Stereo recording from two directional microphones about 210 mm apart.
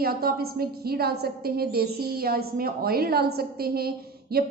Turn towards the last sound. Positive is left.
turn(degrees=-45)  # may be behind; listen again after turning